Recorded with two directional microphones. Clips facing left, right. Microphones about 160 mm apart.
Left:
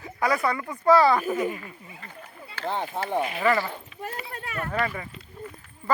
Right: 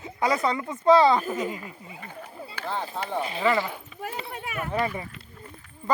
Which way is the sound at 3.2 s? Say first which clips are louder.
Even; 30° right (ahead or behind).